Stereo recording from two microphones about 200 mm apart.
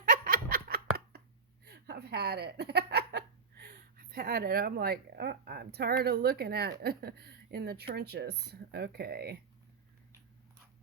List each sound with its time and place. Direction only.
0.0 s laughter: 45° right (ahead or behind)
1.6 s speech: 55° right (ahead or behind)